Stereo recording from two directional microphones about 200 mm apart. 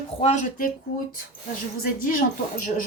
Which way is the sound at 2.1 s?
45° left (ahead or behind).